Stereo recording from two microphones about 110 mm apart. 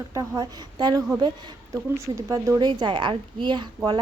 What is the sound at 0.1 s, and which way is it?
A woman's voice, 35° right (ahead or behind).